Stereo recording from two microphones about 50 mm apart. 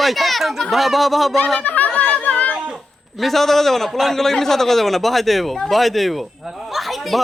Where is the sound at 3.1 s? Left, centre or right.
Centre.